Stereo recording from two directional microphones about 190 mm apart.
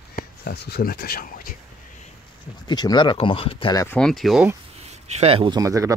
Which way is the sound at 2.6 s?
20° left (ahead or behind).